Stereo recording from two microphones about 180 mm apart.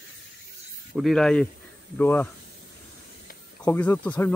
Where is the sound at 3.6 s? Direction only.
10° left (ahead or behind).